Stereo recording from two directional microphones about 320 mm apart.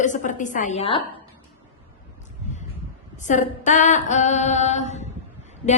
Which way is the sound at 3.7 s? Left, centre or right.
Left.